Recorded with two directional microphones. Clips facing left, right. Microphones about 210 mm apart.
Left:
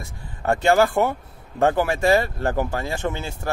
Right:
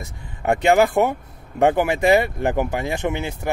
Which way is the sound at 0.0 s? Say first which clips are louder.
Right 2 dB; 20° right (ahead or behind).